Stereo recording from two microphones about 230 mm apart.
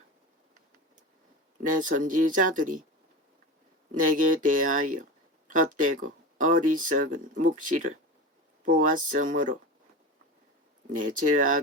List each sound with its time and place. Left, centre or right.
1.6 s speech: right
3.9 s speech: right
10.9 s speech: right